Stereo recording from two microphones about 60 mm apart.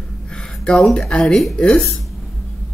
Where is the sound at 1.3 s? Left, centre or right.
Centre.